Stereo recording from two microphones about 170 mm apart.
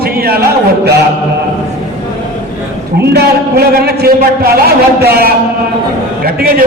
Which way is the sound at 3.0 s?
70° right (ahead or behind).